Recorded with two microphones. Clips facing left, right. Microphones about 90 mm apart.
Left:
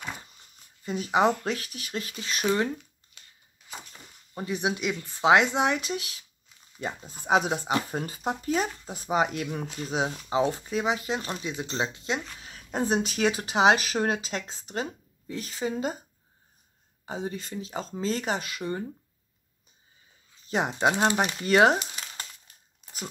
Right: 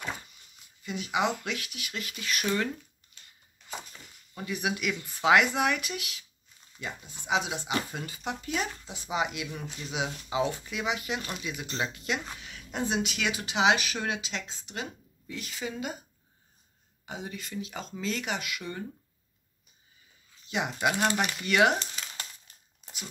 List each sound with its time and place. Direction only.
0.8 s speech: 35° left (ahead or behind)
4.3 s speech: 30° left (ahead or behind)
17.0 s speech: 35° left (ahead or behind)
20.4 s speech: 35° left (ahead or behind)
20.9 s speech: 25° left (ahead or behind)
22.8 s dog: centre (ahead or behind)